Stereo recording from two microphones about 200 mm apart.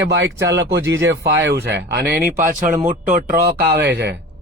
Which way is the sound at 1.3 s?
60° right (ahead or behind).